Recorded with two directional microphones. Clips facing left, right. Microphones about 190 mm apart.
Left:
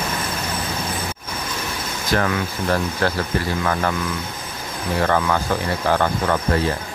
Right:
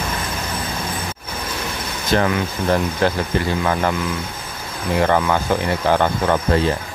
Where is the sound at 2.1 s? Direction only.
20° right (ahead or behind).